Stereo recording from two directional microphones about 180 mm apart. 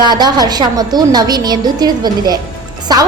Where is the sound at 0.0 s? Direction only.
25° right (ahead or behind).